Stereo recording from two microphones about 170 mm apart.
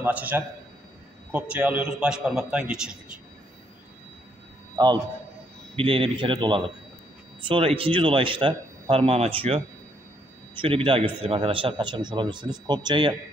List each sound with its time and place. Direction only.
0.0 s a man's voice: 10° right (ahead or behind)
4.7 s a man's voice: 25° right (ahead or behind)